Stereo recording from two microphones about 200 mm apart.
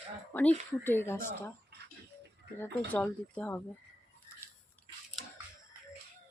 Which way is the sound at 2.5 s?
5° left (ahead or behind).